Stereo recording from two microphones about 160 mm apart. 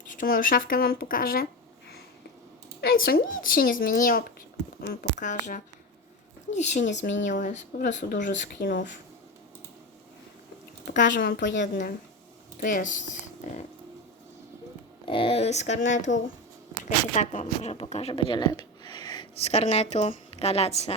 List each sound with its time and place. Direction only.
0.1 s a woman's voice: 60° left (ahead or behind)
2.8 s a woman's voice: 65° left (ahead or behind); by 8.7 s 50° left (ahead or behind)
10.8 s speech: 70° left (ahead or behind)
12.5 s speech: 55° left (ahead or behind)
15.0 s speech: 30° left (ahead or behind)
17.2 s speech: 45° left (ahead or behind)
18.1 s a sound: 30° left (ahead or behind)
19.4 s a woman's voice: 40° left (ahead or behind)